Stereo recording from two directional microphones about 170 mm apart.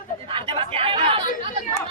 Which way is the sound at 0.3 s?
30° right (ahead or behind).